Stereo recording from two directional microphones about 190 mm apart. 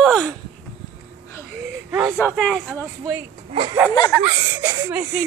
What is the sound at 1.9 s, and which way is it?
Speech, 10° right (ahead or behind).